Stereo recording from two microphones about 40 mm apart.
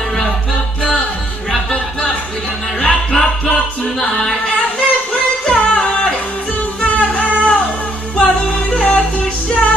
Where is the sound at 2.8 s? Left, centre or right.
Centre.